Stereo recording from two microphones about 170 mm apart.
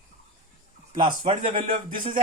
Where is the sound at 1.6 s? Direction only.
50° right (ahead or behind).